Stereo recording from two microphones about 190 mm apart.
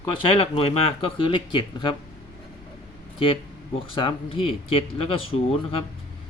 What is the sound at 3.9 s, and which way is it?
Speech, 30° left (ahead or behind).